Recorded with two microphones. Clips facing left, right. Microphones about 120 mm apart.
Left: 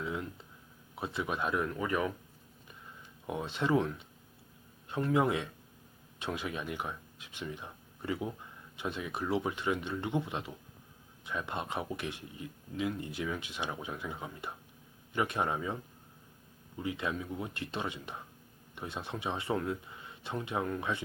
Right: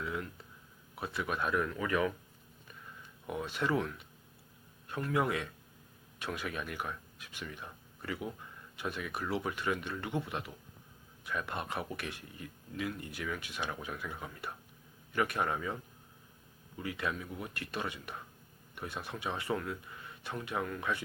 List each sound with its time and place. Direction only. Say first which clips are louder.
0.0 s a sound: left 1 dB; 20° left (ahead or behind)
0.9 s speech: left 1 dB; 20° left (ahead or behind)
3.2 s speech: left 2 dB; 20° left (ahead or behind)